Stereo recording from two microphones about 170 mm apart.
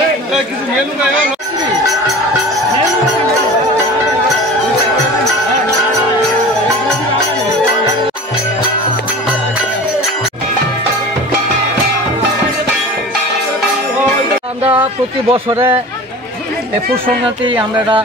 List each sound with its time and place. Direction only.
15.2 s speech: 30° right (ahead or behind)
15.5 s speech: 15° right (ahead or behind)